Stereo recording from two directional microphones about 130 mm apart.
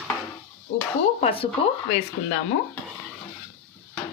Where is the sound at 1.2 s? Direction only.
45° left (ahead or behind).